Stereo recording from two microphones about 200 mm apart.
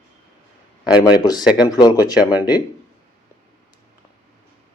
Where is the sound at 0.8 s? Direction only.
20° left (ahead or behind).